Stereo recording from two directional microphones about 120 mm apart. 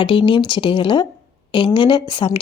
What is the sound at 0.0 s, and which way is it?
A woman's voice, 45° left (ahead or behind).